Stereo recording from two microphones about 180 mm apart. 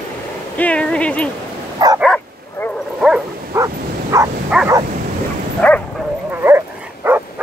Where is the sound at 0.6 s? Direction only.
5° left (ahead or behind).